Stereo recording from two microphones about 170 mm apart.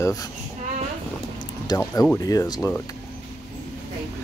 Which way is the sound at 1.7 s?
25° left (ahead or behind).